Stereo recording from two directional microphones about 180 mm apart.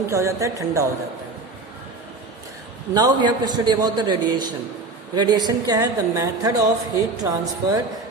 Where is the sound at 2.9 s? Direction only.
20° right (ahead or behind).